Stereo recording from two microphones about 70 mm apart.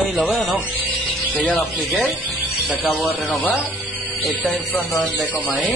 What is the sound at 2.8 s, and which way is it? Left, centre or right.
Speech, left.